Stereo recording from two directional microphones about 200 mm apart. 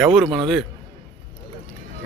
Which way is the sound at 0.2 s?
Centre (ahead or behind).